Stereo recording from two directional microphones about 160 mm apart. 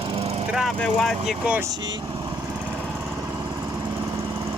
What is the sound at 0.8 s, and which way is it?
Speech, centre (ahead or behind).